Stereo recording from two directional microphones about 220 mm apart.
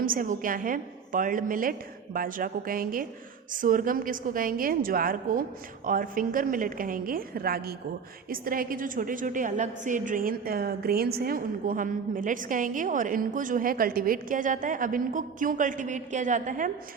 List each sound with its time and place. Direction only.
0.0 s a woman's voice: 40° right (ahead or behind)